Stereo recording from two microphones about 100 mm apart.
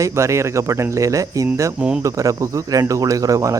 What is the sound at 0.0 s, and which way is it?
Speech, 30° right (ahead or behind).